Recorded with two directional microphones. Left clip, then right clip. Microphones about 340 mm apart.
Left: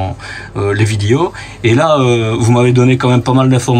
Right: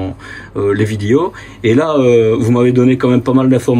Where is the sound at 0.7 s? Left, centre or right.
Centre.